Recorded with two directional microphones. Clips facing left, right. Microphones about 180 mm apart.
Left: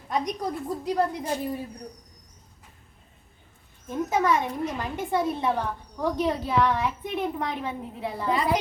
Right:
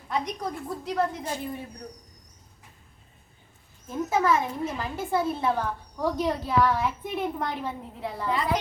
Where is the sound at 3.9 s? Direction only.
5° right (ahead or behind).